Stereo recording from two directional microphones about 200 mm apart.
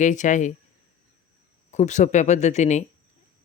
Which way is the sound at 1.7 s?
35° left (ahead or behind).